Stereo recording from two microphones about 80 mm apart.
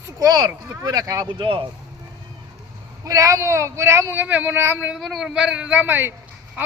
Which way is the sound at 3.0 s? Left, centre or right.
Right.